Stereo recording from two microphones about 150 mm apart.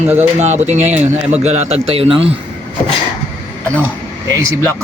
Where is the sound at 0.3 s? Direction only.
50° right (ahead or behind).